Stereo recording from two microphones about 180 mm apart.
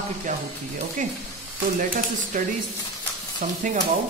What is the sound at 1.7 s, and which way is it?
Speech, 45° right (ahead or behind).